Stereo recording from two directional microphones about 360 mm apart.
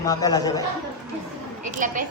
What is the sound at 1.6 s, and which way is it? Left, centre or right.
Speech, right.